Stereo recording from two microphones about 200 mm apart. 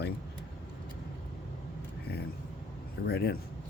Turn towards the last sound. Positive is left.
turn(degrees=55)  # may be behind; listen again after turning